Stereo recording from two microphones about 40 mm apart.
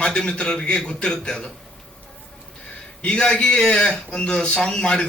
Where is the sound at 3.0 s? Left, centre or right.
Left.